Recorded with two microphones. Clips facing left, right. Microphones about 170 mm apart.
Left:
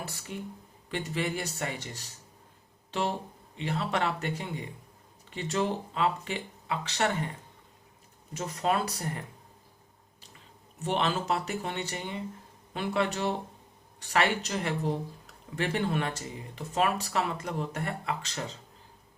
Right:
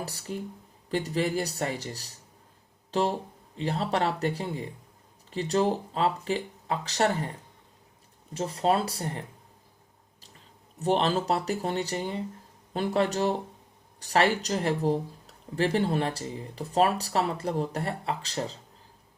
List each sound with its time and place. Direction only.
0.0 s speech: 35° right (ahead or behind)
8.3 s speech: 30° right (ahead or behind)
10.8 s speech: 35° right (ahead or behind)